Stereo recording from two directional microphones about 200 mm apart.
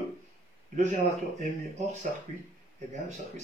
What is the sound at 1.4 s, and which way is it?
Speech, 35° right (ahead or behind).